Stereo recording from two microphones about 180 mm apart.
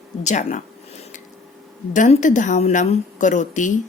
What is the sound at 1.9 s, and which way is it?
A woman's voice, 40° left (ahead or behind).